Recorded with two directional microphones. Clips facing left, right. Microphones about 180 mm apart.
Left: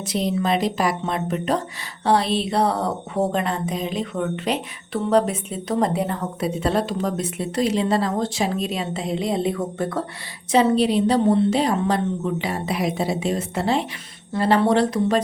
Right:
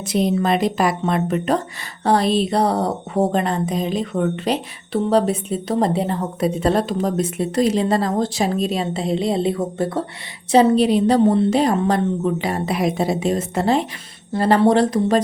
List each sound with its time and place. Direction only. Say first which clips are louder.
0.0 s a woman's voice: right 4 dB; 50° right (ahead or behind)
2.0 s a woman's voice: right 3 dB; 45° right (ahead or behind); by 6.1 s 30° right (ahead or behind)
6.4 s speech: right 4 dB; 40° right (ahead or behind)
10.5 s a woman's voice: right 3 dB; 45° right (ahead or behind)